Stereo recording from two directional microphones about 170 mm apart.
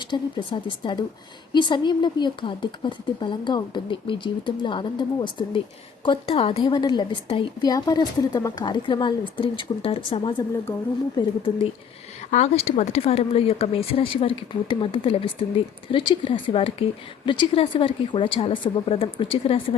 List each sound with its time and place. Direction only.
0.1 s speech: 30° left (ahead or behind)
11.2 s speech: 25° left (ahead or behind)
12.3 s speech: 40° left (ahead or behind)